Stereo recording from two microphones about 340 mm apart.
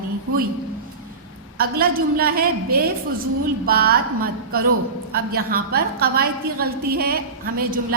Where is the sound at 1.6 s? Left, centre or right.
Right.